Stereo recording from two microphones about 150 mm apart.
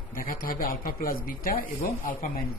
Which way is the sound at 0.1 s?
65° left (ahead or behind).